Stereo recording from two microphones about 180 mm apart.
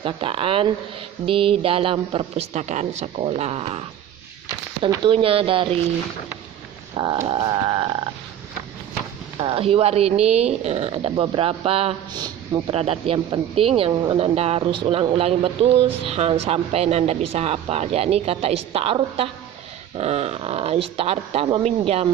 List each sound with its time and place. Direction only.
0.0 s speech: 30° right (ahead or behind)
5.1 s speech: 30° right (ahead or behind)
6.9 s speech: 25° right (ahead or behind)
9.4 s speech: 30° right (ahead or behind)